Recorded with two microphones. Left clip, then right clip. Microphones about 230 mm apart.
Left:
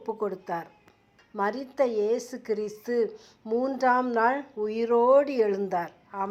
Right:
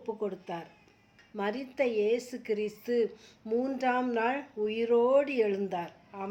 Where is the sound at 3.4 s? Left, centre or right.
Centre.